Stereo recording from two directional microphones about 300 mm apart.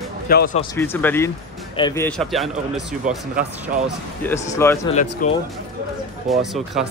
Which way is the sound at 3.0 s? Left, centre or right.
Right.